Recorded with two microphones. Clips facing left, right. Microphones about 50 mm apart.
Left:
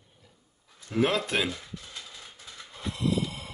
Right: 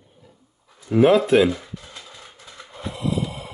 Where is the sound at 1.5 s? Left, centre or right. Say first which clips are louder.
Right 10 dB; centre.